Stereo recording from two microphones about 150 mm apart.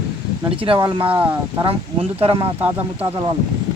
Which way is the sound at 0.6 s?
35° right (ahead or behind).